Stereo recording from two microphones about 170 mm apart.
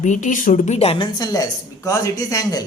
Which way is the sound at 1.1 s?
20° left (ahead or behind).